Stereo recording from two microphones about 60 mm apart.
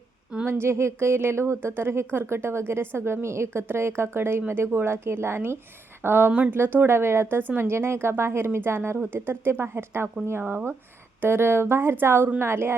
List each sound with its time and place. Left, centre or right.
0.4 s a woman's voice: right